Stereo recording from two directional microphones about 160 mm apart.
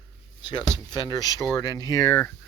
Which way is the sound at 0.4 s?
25° left (ahead or behind).